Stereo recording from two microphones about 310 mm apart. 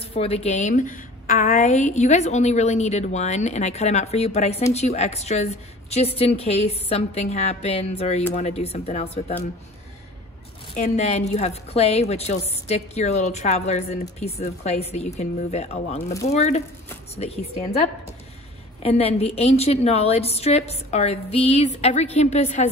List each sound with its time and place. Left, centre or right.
0.0 s a woman's voice: centre
10.7 s a woman's voice: left